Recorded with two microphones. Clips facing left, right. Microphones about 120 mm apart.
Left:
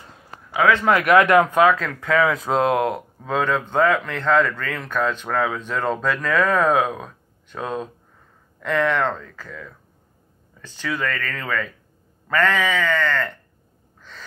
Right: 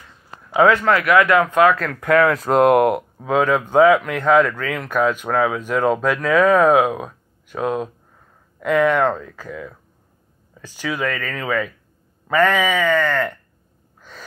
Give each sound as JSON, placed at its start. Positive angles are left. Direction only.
{"t": 0.5, "sound": "a sound", "side_deg": -25}
{"t": 0.8, "sound": "speech", "side_deg": 20}
{"t": 1.7, "sound": "speech", "side_deg": 0}
{"t": 14.0, "sound": "gasp", "side_deg": -10}